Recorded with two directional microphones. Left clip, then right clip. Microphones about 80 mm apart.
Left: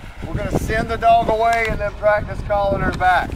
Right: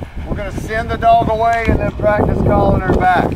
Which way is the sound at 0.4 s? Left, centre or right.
Centre.